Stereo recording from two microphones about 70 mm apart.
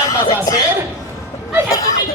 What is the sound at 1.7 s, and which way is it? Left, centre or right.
Speech, left.